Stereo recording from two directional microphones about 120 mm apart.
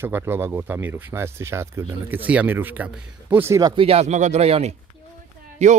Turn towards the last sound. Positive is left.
turn(degrees=-75)  # may be behind; listen again after turning